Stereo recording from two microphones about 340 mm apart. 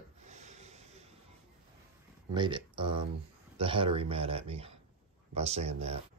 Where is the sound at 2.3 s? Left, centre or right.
Centre.